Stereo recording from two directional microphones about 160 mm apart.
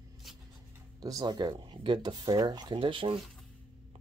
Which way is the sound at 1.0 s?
25° right (ahead or behind).